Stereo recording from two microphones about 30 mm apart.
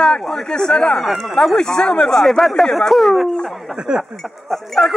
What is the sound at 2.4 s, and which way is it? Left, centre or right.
Speech, centre.